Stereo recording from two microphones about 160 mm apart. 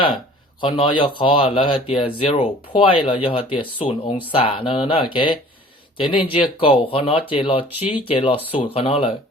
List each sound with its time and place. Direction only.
0.6 s speech: 30° left (ahead or behind)